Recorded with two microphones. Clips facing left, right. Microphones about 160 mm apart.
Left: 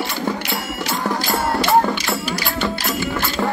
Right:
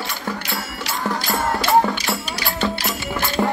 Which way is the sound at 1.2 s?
Centre (ahead or behind).